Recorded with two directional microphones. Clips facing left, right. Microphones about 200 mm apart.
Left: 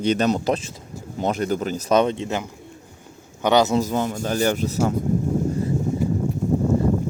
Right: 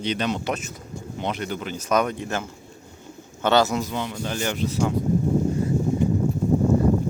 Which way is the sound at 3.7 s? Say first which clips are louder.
Left 5 dB; 45° left (ahead or behind).